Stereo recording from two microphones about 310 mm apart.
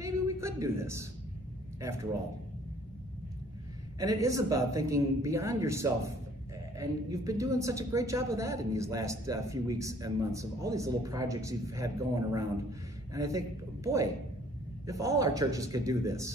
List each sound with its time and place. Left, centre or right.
0.0 s a sound: centre
4.0 s speech: centre
14.9 s speech: centre